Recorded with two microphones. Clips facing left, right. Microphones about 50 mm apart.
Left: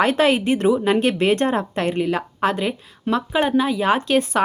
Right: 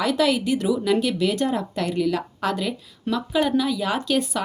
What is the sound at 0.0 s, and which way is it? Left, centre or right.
A woman's voice, left.